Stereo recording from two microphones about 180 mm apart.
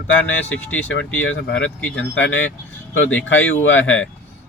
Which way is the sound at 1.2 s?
90° left.